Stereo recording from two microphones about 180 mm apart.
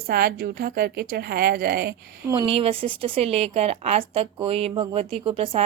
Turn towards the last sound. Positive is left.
turn(degrees=-30)  # may be behind; listen again after turning